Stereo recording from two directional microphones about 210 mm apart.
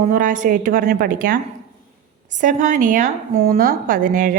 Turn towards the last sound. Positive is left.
turn(degrees=-40)  # may be behind; listen again after turning